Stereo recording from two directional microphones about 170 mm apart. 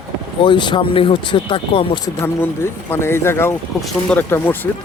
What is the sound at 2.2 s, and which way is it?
Speech, 15° left (ahead or behind).